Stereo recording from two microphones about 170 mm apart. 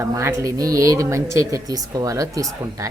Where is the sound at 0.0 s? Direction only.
15° right (ahead or behind).